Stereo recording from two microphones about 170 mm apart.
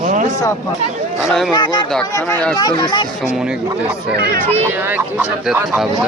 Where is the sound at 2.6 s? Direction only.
25° left (ahead or behind).